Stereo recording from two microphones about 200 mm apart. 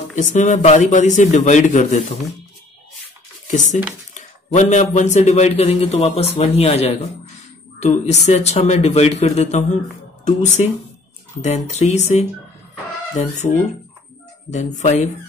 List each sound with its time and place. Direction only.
0.1 s a man's voice: 40° left (ahead or behind)
3.4 s a man's voice: 40° left (ahead or behind)
14.5 s a man's voice: 35° left (ahead or behind)